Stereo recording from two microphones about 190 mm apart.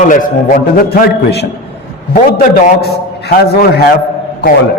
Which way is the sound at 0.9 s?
55° left (ahead or behind).